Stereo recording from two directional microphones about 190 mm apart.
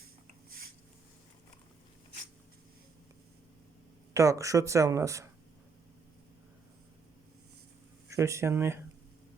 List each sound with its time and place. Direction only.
4.1 s speech: 15° right (ahead or behind)
8.1 s speech: 15° right (ahead or behind)